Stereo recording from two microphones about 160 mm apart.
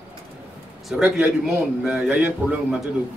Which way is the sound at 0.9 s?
5° right (ahead or behind).